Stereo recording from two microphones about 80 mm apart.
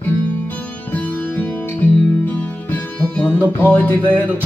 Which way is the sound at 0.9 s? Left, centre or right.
Left.